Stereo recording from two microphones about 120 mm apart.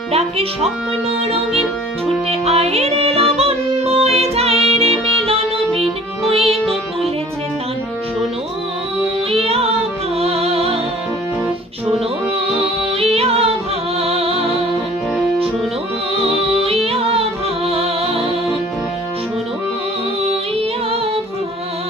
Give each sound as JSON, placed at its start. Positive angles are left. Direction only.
{"t": 0.1, "sound": "speech", "side_deg": -55}
{"t": 2.3, "sound": "music", "side_deg": -60}
{"t": 4.7, "sound": "saxophone", "side_deg": -55}
{"t": 6.3, "sound": "music", "side_deg": -55}
{"t": 9.3, "sound": "music", "side_deg": -55}
{"t": 12.5, "sound": "music", "side_deg": -55}
{"t": 16.2, "sound": "music", "side_deg": -55}